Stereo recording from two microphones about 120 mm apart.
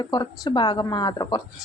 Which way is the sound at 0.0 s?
35° left (ahead or behind).